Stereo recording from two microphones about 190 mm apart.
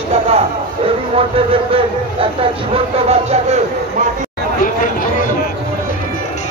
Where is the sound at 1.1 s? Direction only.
30° right (ahead or behind).